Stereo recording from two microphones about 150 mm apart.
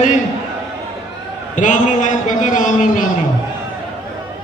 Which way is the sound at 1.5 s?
55° left (ahead or behind).